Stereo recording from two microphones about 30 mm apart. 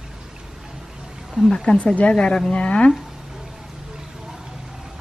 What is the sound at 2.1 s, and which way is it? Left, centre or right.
Speech, left.